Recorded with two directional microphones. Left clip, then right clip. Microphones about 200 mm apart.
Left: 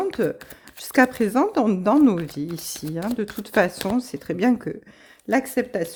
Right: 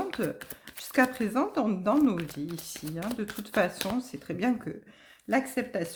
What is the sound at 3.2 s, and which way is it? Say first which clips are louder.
Speech: left 7 dB; 50° left (ahead or behind).